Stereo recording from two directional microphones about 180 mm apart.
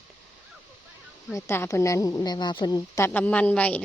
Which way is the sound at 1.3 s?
15° left (ahead or behind).